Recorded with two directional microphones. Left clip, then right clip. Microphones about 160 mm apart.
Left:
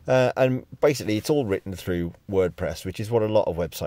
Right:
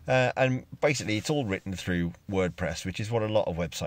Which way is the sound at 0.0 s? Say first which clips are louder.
Left 5 dB; 35° left (ahead or behind).